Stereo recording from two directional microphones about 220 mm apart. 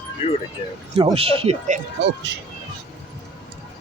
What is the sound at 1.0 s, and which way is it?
Speech, 25° right (ahead or behind).